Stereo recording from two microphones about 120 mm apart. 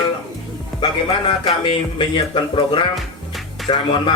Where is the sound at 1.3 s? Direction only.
45° left (ahead or behind).